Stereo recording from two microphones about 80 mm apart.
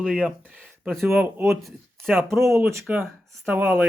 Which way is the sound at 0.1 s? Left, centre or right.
Centre.